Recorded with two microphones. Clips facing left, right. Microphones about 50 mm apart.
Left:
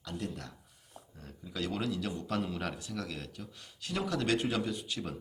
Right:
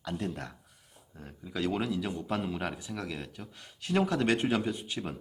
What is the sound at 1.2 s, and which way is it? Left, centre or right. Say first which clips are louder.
Speech: right 4 dB; right.